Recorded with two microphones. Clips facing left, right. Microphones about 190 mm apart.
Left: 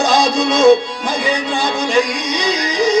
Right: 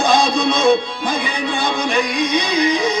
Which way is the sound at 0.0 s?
55° right (ahead or behind).